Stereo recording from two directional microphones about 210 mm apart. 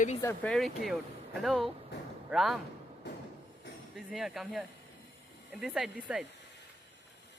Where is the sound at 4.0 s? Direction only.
Centre (ahead or behind).